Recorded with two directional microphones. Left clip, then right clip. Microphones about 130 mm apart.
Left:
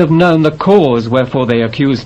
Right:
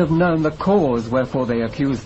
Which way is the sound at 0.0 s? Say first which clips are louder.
Left 8 dB; 30° right (ahead or behind).